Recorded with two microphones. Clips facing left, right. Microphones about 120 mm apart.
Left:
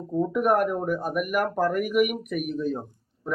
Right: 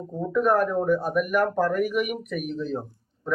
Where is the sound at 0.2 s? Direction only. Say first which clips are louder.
Even; 15° left (ahead or behind).